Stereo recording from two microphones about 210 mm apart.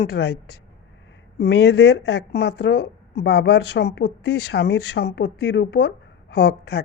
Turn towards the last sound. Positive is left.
turn(degrees=50)  # may be behind; listen again after turning